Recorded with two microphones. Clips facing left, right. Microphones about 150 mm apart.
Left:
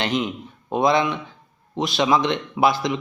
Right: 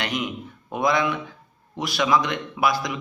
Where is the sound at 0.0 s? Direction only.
25° left (ahead or behind).